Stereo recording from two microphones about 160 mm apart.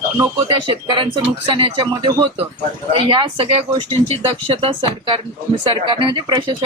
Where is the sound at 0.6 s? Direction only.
30° right (ahead or behind).